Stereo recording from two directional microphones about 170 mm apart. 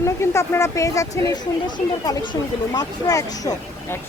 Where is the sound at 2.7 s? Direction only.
20° left (ahead or behind).